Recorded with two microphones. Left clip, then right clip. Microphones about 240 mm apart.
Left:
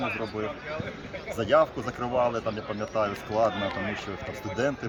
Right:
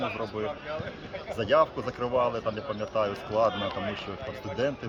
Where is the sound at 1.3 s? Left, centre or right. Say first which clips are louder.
Left 1 dB; centre.